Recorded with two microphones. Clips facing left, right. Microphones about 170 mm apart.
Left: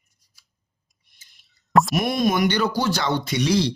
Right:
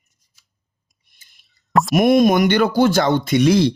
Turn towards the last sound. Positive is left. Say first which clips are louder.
# right 7 dB
turn(degrees=-50)  # may be behind; listen again after turning